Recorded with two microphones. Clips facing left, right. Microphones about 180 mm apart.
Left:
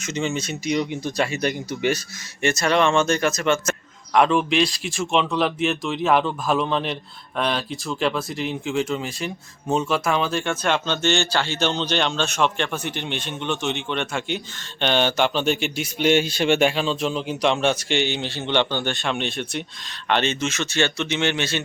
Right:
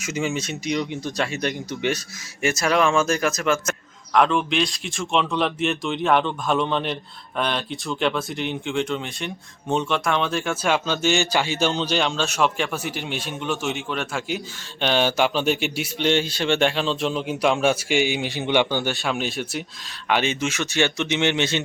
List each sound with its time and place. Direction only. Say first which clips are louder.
0.0 s speech: even; 5° right (ahead or behind)
16.0 s speech: left 3 dB; 10° left (ahead or behind); by 21.6 s 20° right (ahead or behind)